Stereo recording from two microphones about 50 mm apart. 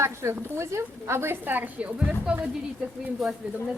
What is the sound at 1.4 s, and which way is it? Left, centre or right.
Speech, right.